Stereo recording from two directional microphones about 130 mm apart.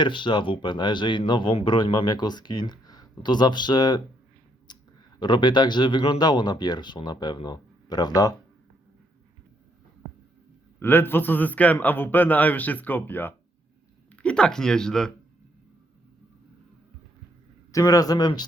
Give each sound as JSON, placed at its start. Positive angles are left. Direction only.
{"t": 0.0, "sound": "speech", "side_deg": 35}
{"t": 4.7, "sound": "a sound", "side_deg": 35}
{"t": 5.2, "sound": "speech", "side_deg": 35}
{"t": 10.8, "sound": "a man's voice", "side_deg": 15}
{"t": 17.7, "sound": "speech", "side_deg": 25}